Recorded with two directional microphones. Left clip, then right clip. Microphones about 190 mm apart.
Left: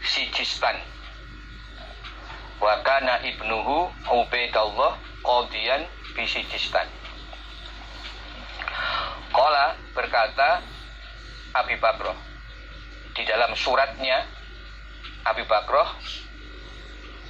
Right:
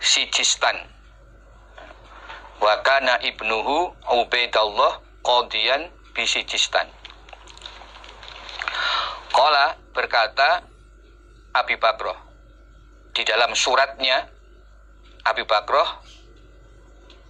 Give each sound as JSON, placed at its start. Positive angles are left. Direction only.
{"t": 0.0, "sound": "speech", "side_deg": -35}
{"t": 2.2, "sound": "a man's voice", "side_deg": -35}
{"t": 8.5, "sound": "a sound", "side_deg": -35}
{"t": 11.5, "sound": "a man's voice", "side_deg": -35}
{"t": 13.1, "sound": "a man's voice", "side_deg": -35}